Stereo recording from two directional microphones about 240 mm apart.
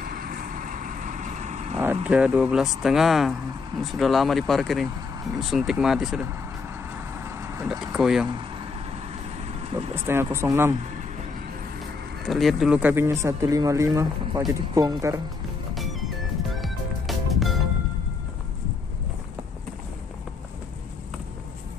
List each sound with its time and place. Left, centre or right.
0.0 s vehicle: right
2.0 s speech: centre
4.8 s speech: centre
5.4 s speech: centre
7.2 s vehicle: centre
9.9 s speech: centre
12.3 s speech: centre
15.7 s music: centre